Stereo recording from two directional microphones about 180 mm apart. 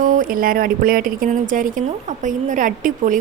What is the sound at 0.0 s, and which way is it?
A woman's voice, 50° right (ahead or behind).